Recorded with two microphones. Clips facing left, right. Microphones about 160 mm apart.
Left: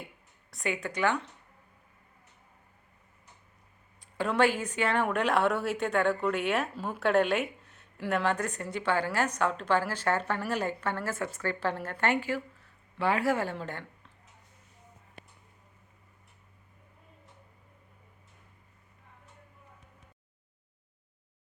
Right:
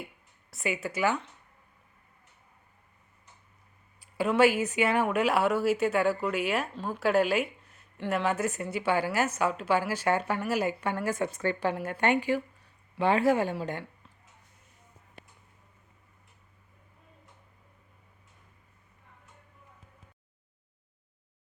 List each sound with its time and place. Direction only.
0.5 s speech: 5° right (ahead or behind)
4.0 s speech: 5° right (ahead or behind)